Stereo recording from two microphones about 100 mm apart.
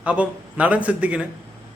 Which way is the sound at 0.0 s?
15° right (ahead or behind).